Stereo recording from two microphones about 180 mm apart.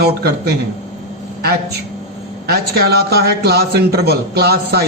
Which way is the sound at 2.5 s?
60° right (ahead or behind).